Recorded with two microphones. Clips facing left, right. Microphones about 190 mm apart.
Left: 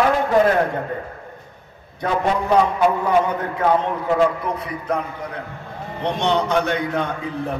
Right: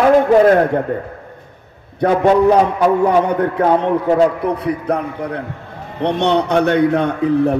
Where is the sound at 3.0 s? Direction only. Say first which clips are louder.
Right 5 dB; 60° right (ahead or behind).